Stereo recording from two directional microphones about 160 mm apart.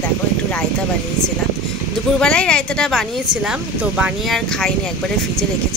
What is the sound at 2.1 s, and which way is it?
Speech, 5° left (ahead or behind).